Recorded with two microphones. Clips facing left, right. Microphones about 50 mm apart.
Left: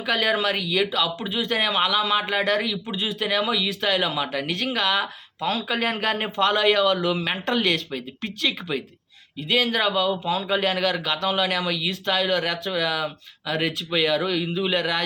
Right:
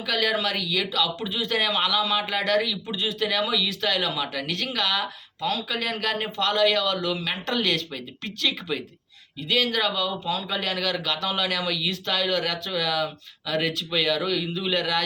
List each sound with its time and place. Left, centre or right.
0.0 s speech: centre